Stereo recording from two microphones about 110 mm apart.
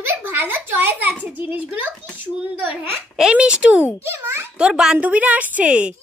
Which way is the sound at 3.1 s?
5° right (ahead or behind).